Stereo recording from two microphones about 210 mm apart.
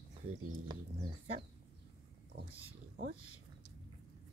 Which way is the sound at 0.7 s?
20° right (ahead or behind).